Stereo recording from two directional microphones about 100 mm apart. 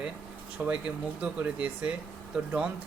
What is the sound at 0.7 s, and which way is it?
Speech, 15° right (ahead or behind).